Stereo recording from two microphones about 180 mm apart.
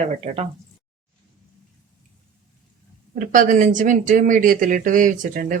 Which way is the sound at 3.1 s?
50° right (ahead or behind).